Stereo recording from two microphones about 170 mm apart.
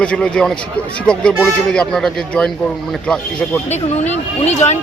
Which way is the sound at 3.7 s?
40° left (ahead or behind).